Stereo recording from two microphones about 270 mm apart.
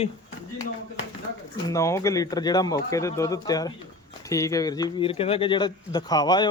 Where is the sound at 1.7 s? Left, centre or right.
Centre.